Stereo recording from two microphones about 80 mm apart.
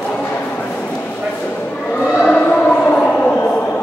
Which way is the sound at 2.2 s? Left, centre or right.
Centre.